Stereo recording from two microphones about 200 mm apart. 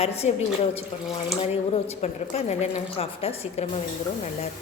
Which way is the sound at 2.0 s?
35° left (ahead or behind).